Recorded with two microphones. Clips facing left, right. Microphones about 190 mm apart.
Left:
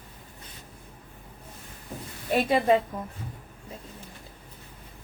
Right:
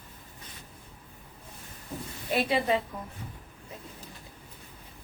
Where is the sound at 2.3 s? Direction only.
45° left (ahead or behind).